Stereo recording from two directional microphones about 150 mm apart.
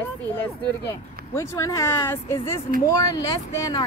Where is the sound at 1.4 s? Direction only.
20° left (ahead or behind).